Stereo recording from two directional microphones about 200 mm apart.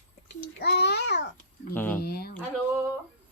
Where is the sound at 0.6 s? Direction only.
55° left (ahead or behind).